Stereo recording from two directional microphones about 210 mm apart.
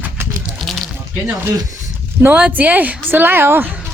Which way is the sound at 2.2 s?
10° right (ahead or behind).